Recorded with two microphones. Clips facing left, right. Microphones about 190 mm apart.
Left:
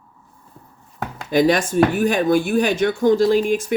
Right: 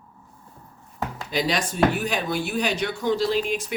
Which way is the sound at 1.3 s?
50° left (ahead or behind).